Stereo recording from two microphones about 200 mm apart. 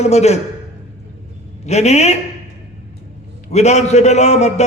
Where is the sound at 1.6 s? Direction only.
35° left (ahead or behind).